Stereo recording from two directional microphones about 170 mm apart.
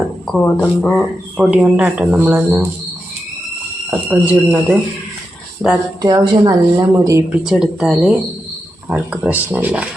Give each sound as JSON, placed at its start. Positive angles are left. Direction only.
{"t": 0.3, "sound": "speech", "side_deg": 5}
{"t": 3.8, "sound": "speech", "side_deg": -10}
{"t": 6.0, "sound": "a woman's voice", "side_deg": -25}
{"t": 7.4, "sound": "speech", "side_deg": -5}